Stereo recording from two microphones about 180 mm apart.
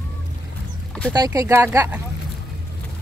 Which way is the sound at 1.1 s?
20° right (ahead or behind).